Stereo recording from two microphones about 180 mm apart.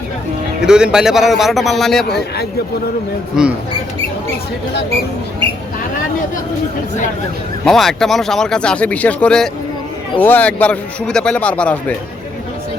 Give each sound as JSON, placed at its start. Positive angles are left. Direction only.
{"t": 0.6, "sound": "speech", "side_deg": -5}
{"t": 2.0, "sound": "a man's voice", "side_deg": 65}
{"t": 3.4, "sound": "speech", "side_deg": -5}
{"t": 7.6, "sound": "a man's voice", "side_deg": 0}